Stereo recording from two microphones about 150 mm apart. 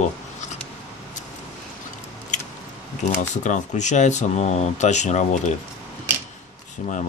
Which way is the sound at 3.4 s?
55° left (ahead or behind).